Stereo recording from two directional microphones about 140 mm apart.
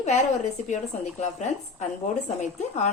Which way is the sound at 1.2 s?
55° left (ahead or behind).